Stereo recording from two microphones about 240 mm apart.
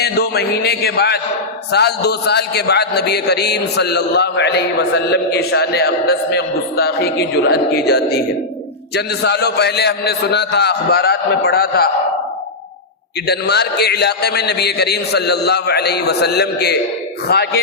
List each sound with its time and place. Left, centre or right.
0.0 s a man's voice: left
13.2 s a man's voice: left